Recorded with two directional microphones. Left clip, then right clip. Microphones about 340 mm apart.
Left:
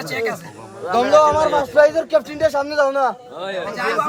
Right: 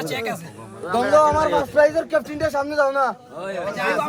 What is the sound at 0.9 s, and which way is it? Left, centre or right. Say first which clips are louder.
A man's voice: left 3 dB; left.